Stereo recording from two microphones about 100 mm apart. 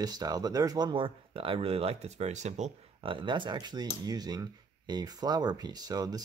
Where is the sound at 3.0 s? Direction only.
55° right (ahead or behind); by 6.2 s 40° right (ahead or behind).